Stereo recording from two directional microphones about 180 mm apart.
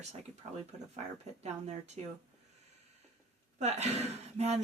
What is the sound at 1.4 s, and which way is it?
Speech, 35° right (ahead or behind).